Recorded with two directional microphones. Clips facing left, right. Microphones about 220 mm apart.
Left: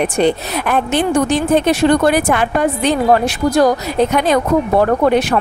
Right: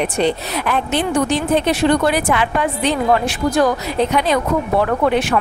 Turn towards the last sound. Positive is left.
turn(degrees=40)  # may be behind; listen again after turning